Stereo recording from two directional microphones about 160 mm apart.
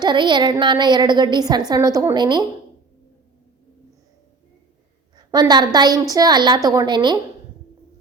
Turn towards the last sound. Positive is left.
turn(degrees=-30)  # may be behind; listen again after turning